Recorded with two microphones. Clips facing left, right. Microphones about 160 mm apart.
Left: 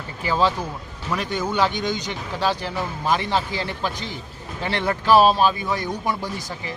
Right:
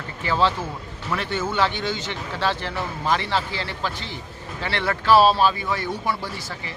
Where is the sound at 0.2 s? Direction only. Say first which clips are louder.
Left 1 dB; 10° left (ahead or behind).